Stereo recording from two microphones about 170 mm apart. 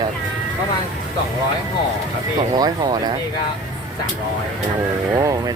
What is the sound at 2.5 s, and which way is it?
Speech, 25° right (ahead or behind).